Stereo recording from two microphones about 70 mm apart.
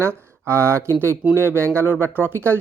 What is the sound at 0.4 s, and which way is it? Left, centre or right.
Speech, right.